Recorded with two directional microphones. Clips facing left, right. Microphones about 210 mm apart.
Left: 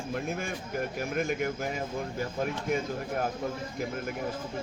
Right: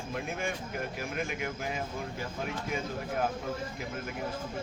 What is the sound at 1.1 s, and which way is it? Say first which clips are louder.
Speech: left 7 dB; 45° left (ahead or behind).